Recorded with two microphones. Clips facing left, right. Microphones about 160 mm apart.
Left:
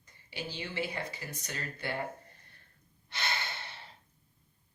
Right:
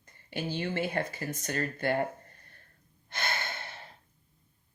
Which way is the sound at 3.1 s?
50° right (ahead or behind).